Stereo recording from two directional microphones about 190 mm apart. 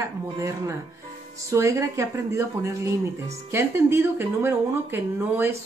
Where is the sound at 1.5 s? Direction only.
15° right (ahead or behind).